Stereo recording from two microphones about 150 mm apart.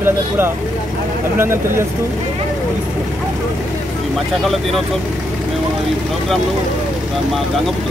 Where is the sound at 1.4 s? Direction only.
15° right (ahead or behind).